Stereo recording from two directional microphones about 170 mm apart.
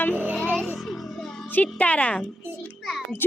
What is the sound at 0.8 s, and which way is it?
Music, centre (ahead or behind).